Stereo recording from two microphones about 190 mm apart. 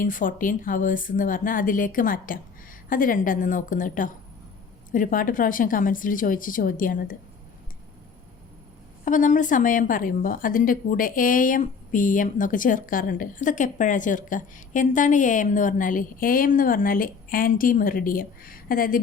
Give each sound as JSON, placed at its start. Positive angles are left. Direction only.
{"t": 0.0, "sound": "a woman's voice", "side_deg": 45}
{"t": 9.0, "sound": "a woman's voice", "side_deg": 40}